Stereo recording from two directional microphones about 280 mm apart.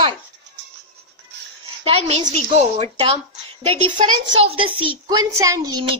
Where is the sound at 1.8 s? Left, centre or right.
Centre.